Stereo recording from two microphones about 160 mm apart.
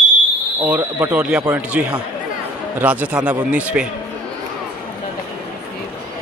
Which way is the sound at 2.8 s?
10° right (ahead or behind).